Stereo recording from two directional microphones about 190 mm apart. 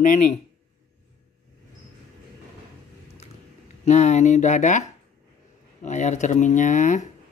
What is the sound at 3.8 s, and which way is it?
Speech, 35° left (ahead or behind).